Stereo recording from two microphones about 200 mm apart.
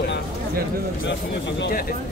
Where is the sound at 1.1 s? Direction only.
60° left (ahead or behind).